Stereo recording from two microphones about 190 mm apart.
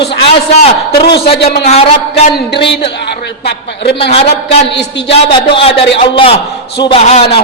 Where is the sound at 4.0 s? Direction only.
30° left (ahead or behind).